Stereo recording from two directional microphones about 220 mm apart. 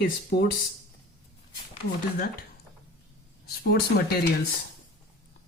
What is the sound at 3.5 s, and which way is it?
Speech, 45° left (ahead or behind).